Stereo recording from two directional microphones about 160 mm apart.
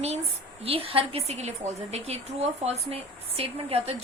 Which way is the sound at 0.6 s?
35° right (ahead or behind).